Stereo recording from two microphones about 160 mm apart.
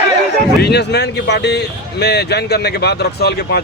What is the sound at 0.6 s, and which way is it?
Speech, 90° left.